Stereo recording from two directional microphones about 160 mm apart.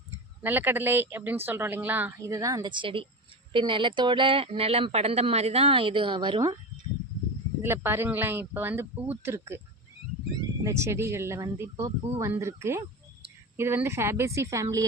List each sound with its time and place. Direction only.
0.4 s speech: 10° right (ahead or behind)
7.6 s speech: 15° right (ahead or behind)
10.6 s speech: 20° right (ahead or behind)